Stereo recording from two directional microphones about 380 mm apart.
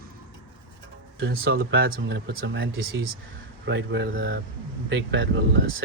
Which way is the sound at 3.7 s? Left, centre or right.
Right.